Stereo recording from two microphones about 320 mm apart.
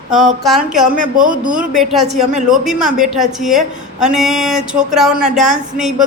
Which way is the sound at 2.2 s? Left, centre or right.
Right.